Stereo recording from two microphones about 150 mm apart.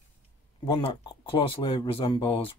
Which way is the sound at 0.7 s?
35° left (ahead or behind).